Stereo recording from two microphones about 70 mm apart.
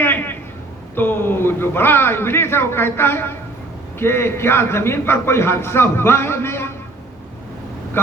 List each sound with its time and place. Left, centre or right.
0.0 s a sound: left
0.9 s a man's voice: left
8.0 s speech: left